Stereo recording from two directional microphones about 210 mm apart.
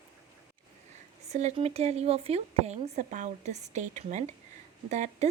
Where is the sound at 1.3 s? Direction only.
30° right (ahead or behind).